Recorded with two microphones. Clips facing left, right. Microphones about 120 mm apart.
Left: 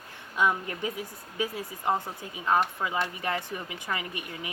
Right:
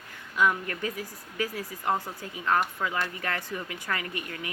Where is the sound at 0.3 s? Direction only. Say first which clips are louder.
Right 1 dB; 20° left (ahead or behind).